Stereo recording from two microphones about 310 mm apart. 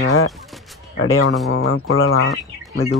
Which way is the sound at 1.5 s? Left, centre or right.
Left.